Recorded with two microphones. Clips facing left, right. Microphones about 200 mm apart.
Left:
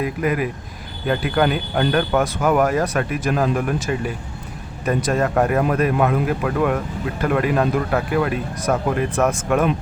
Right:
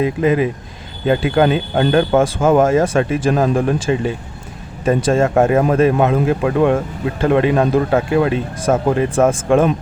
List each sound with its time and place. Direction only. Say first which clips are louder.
0.0 s speech: right 6 dB; 25° right (ahead or behind)